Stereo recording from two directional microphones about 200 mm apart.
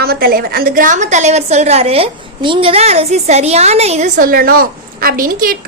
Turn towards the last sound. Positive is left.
turn(degrees=-45)  # may be behind; listen again after turning